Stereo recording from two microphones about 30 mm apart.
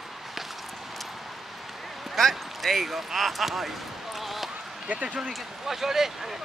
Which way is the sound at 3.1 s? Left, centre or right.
Centre.